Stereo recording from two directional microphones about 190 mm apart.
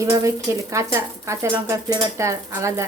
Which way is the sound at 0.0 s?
15° right (ahead or behind).